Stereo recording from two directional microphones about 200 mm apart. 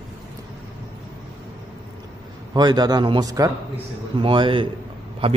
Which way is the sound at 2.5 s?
20° right (ahead or behind).